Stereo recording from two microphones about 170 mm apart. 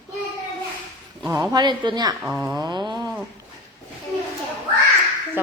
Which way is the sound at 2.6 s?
25° right (ahead or behind).